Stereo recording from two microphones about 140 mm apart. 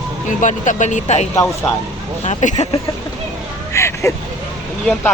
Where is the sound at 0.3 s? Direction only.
65° left (ahead or behind).